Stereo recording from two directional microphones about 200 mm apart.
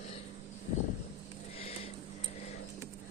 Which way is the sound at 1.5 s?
30° left (ahead or behind).